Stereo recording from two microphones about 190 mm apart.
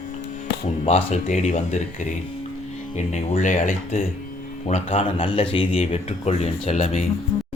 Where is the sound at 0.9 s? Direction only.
35° left (ahead or behind).